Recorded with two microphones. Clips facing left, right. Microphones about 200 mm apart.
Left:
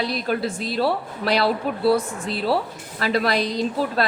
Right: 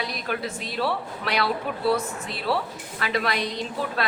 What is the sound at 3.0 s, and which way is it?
Speech, 35° left (ahead or behind).